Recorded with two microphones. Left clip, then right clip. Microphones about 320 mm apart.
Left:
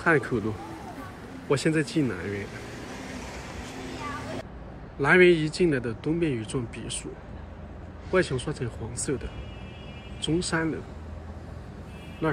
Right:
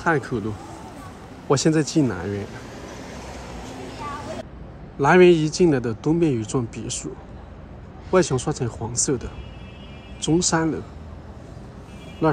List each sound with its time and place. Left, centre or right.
0.0 s a man's voice: centre
1.5 s speech: centre
2.7 s vehicle: right
5.0 s speech: centre
8.1 s speech: centre
10.2 s speech: centre
12.2 s speech: centre